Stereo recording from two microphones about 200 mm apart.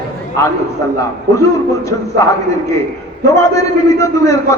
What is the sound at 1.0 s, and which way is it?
A man's voice, 15° left (ahead or behind).